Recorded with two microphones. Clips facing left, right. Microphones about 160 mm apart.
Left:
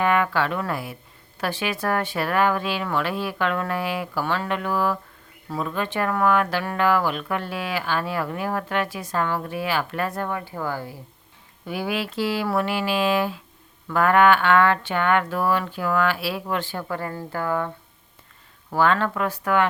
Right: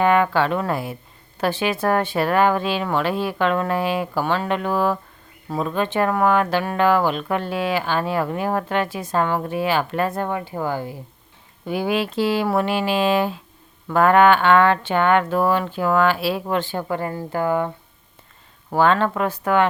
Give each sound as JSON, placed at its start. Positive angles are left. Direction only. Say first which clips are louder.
{"t": 0.0, "sound": "speech", "louder": "right 4 dB", "side_deg": -25}
{"t": 18.7, "sound": "speech", "louder": "right 3 dB", "side_deg": -25}